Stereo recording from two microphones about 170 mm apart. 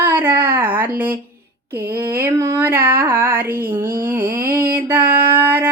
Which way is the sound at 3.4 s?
10° right (ahead or behind).